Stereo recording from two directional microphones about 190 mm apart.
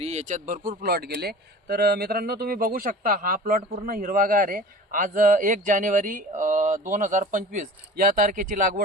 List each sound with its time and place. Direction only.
0.0 s a man's voice: 35° right (ahead or behind)